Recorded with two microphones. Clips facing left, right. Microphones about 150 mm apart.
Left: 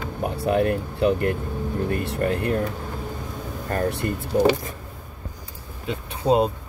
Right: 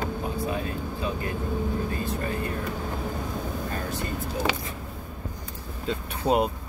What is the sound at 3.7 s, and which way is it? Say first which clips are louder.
Speech: left 6 dB; 60° left (ahead or behind).